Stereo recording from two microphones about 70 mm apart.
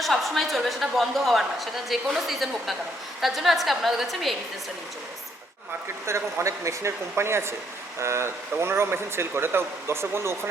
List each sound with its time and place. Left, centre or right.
0.0 s a woman's voice: centre
6.1 s speech: right